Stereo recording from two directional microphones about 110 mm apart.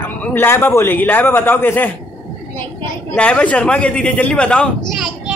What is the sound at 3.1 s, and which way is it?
A man's voice, 10° left (ahead or behind).